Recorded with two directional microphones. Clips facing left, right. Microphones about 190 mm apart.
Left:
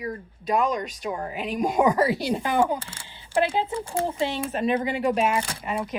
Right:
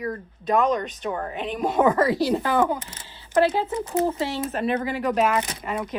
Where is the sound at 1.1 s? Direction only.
15° left (ahead or behind).